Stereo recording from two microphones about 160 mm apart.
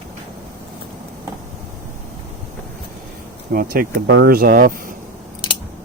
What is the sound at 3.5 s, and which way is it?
Speech, 65° right (ahead or behind).